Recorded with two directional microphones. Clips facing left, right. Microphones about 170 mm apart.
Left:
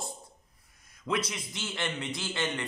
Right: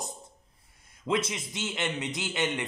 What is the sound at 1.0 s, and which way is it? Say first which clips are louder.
A man's voice: right 3 dB; 25° right (ahead or behind).